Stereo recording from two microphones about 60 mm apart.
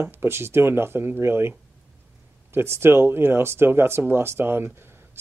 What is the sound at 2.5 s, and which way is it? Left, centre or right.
Speech, right.